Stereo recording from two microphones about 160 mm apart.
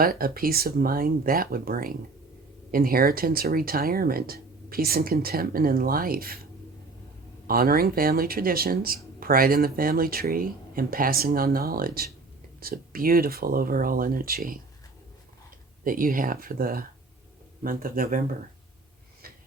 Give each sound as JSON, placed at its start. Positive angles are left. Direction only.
{"t": 0.0, "sound": "speech", "side_deg": -65}
{"t": 7.4, "sound": "speech", "side_deg": -65}
{"t": 15.8, "sound": "speech", "side_deg": -60}